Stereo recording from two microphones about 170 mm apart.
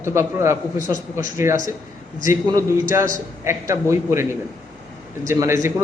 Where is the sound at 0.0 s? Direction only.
15° right (ahead or behind).